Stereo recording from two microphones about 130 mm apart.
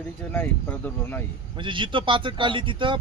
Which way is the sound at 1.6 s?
40° right (ahead or behind).